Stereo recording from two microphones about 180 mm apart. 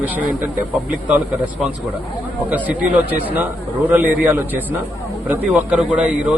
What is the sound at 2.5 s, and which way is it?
Speech, 10° right (ahead or behind).